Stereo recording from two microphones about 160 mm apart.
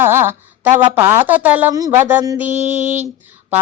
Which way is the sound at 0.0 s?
15° right (ahead or behind).